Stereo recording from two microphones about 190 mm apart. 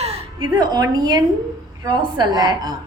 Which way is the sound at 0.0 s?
25° right (ahead or behind).